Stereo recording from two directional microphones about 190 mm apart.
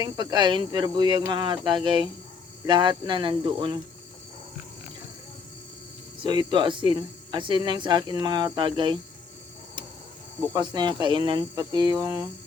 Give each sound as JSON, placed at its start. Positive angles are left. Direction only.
{"t": 0.0, "sound": "speech", "side_deg": -20}
{"t": 6.1, "sound": "speech", "side_deg": -25}
{"t": 10.5, "sound": "speech", "side_deg": -25}